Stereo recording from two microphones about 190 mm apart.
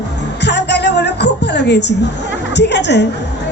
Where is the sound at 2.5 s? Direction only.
65° left (ahead or behind).